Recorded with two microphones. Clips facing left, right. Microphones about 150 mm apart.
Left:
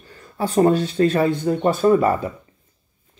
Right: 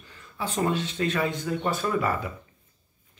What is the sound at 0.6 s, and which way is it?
Speech, 40° left (ahead or behind).